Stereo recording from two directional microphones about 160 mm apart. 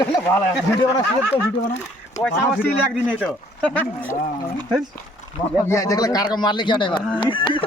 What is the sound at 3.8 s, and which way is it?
Speech, 10° left (ahead or behind).